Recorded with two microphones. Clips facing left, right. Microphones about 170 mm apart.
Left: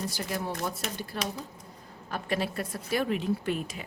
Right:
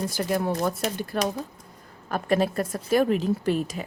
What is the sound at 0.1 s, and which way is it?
A woman's voice, 55° right (ahead or behind).